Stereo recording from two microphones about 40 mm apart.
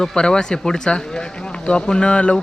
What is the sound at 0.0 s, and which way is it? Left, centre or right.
Speech, centre.